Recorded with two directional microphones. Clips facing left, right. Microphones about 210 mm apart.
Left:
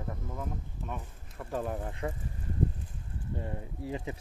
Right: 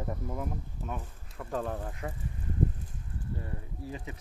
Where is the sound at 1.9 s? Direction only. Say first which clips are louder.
Left 3 dB; 30° left (ahead or behind).